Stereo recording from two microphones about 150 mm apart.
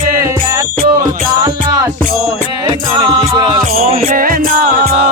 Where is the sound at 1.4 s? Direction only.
25° right (ahead or behind).